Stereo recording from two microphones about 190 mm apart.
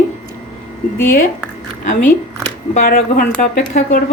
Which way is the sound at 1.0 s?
45° left (ahead or behind).